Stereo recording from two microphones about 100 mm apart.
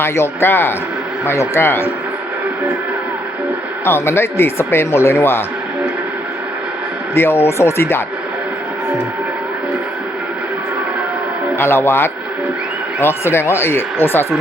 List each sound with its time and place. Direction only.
0.0 s speech: 25° left (ahead or behind)
3.8 s speech: 25° left (ahead or behind)
7.2 s speech: 25° left (ahead or behind)
11.5 s speech: 25° left (ahead or behind)